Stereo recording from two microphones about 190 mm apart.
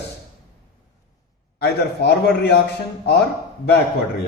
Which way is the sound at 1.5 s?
60° left (ahead or behind).